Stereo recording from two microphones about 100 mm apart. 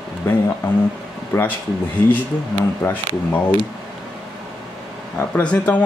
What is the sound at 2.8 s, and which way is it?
Speech, 20° left (ahead or behind).